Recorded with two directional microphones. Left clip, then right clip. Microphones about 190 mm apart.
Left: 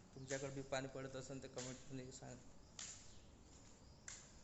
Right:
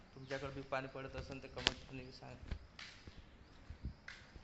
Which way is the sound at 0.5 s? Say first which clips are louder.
Right 3 dB; 15° left (ahead or behind).